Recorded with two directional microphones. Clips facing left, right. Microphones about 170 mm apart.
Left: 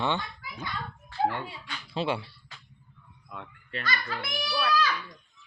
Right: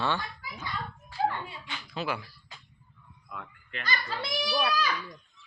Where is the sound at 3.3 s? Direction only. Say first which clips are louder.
Left 2 dB; 25° left (ahead or behind).